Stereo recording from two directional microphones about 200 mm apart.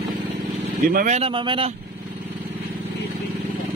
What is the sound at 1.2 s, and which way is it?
Speech, 25° right (ahead or behind).